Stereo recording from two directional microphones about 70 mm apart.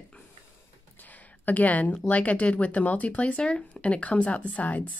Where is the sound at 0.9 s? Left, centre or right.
Left.